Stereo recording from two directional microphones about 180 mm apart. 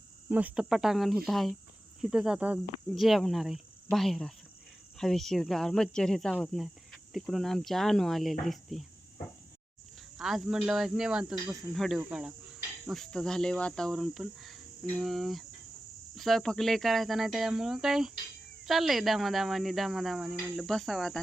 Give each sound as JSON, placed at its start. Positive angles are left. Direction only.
{"t": 0.3, "sound": "cricket", "side_deg": -10}
{"t": 10.2, "sound": "cricket", "side_deg": 0}